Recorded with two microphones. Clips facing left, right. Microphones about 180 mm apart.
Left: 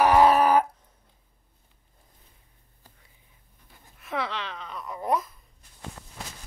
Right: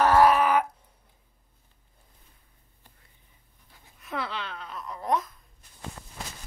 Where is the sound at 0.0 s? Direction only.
15° left (ahead or behind).